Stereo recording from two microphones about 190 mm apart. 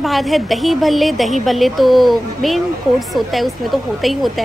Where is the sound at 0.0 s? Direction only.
Centre (ahead or behind).